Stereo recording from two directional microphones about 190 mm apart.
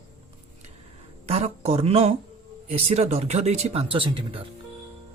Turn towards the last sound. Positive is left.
turn(degrees=-30)  # may be behind; listen again after turning